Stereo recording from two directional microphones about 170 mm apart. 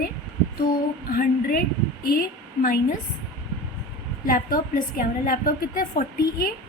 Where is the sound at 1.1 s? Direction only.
55° left (ahead or behind).